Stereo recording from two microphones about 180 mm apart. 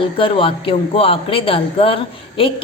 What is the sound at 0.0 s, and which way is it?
A man's voice, 30° left (ahead or behind).